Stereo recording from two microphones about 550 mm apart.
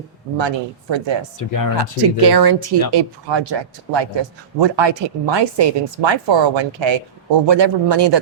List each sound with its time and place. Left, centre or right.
0.3 s speech: right
1.4 s speech: left
1.7 s speech: right